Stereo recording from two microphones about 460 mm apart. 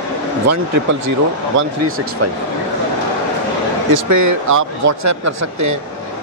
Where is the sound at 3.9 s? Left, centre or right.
Right.